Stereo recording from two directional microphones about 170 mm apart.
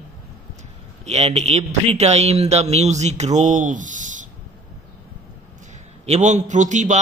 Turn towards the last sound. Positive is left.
turn(degrees=-45)  # may be behind; listen again after turning